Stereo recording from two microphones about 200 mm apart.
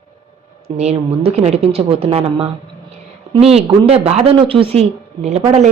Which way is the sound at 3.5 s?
30° right (ahead or behind).